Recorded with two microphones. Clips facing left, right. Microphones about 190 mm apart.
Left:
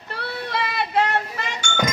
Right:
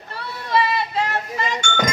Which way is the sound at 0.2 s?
60° left (ahead or behind).